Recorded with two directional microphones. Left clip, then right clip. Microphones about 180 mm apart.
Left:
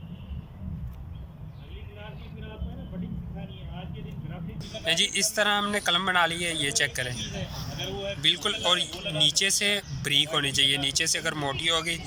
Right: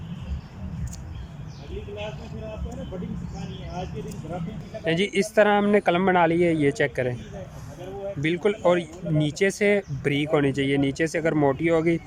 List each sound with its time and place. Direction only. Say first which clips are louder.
4.9 s speech: right 1 dB; 45° right (ahead or behind)
8.2 s speech: right 2 dB; 45° right (ahead or behind)